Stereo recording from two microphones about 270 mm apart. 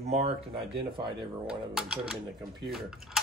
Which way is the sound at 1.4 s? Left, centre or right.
Centre.